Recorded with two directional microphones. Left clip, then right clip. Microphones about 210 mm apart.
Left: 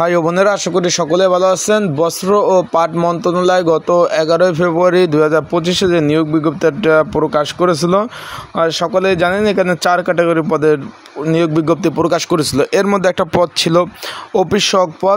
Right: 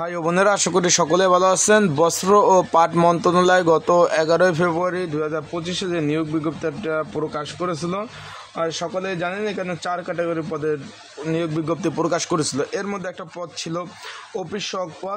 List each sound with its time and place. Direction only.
0.4 s speech: 10° left (ahead or behind)
4.7 s a man's voice: 35° left (ahead or behind)
12.7 s a man's voice: 40° left (ahead or behind)